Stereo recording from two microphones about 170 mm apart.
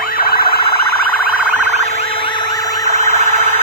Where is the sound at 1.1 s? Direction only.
60° left (ahead or behind).